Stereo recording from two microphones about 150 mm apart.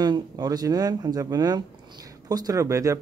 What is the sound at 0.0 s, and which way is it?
Speech, 25° right (ahead or behind).